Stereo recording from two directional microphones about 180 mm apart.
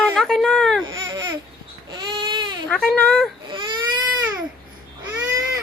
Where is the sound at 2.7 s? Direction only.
10° left (ahead or behind).